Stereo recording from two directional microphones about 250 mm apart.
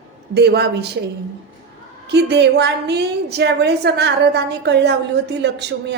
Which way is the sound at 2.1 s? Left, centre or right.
Right.